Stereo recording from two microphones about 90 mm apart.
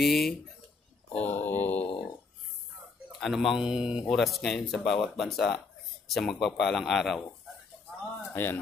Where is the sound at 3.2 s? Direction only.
Centre (ahead or behind).